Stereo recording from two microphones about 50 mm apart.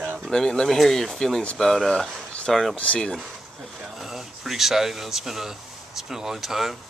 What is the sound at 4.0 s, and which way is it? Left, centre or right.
Speech, centre.